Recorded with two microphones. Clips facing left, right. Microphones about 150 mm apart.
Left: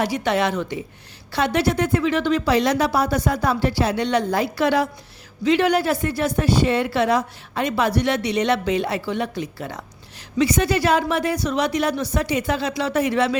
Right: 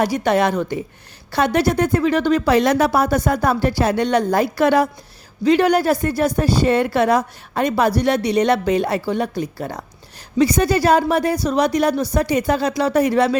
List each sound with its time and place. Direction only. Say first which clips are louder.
0.0 s speech: right 4 dB; 45° right (ahead or behind)